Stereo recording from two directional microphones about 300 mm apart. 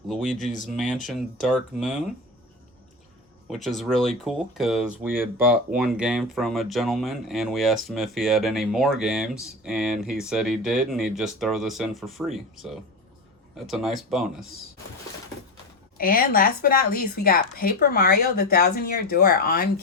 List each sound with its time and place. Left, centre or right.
0.1 s speech: centre
3.5 s speech: centre
16.0 s speech: left